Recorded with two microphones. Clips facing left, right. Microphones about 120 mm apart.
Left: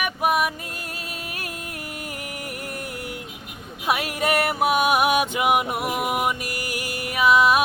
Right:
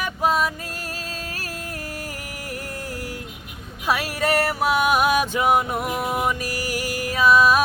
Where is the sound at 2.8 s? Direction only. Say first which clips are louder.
Right 1 dB; 35° right (ahead or behind).